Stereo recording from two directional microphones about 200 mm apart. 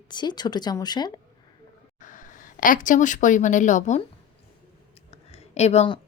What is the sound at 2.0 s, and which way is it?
Speech, 40° left (ahead or behind).